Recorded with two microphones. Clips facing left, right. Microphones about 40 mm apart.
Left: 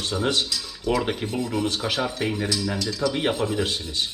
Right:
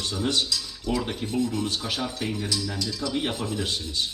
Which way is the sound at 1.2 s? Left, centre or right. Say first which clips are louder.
Right 1 dB; left.